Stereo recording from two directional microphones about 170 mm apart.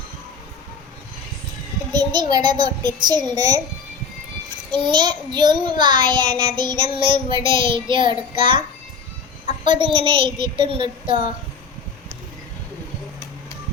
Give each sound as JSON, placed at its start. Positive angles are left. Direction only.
{"t": 1.9, "sound": "child singing", "side_deg": -25}
{"t": 4.7, "sound": "child singing", "side_deg": -25}
{"t": 9.5, "sound": "a child's voice", "side_deg": -30}
{"t": 10.4, "sound": "child singing", "side_deg": -30}